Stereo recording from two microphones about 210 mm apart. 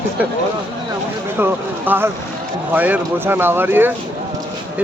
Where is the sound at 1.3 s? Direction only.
10° right (ahead or behind).